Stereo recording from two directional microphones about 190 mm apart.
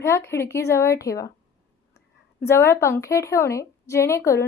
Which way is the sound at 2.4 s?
15° left (ahead or behind).